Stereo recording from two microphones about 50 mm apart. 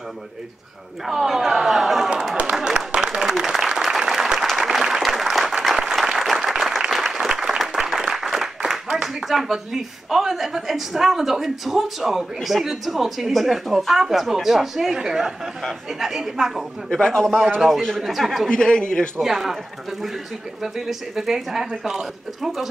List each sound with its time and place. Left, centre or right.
1.0 s speech: centre
1.6 s a sound: centre
2.6 s applause: centre
12.4 s a woman's voice: centre
16.9 s a man's voice: centre
17.6 s a woman's voice: centre
18.5 s a man's voice: centre
19.2 s a woman's voice: centre